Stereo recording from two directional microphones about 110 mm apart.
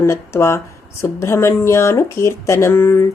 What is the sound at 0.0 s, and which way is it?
Speech, 25° left (ahead or behind).